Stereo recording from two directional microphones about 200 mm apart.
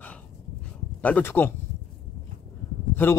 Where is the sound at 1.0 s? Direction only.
10° left (ahead or behind).